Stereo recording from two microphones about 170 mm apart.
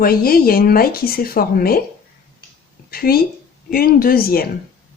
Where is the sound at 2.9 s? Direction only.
60° left (ahead or behind).